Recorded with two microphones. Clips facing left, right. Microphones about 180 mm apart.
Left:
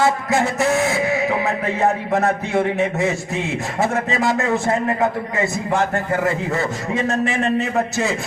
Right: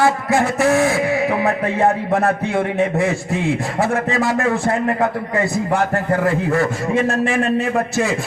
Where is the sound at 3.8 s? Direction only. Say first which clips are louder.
Left 1 dB; 20° left (ahead or behind).